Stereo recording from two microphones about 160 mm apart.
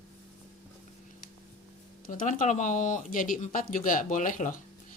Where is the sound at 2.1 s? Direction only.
55° left (ahead or behind).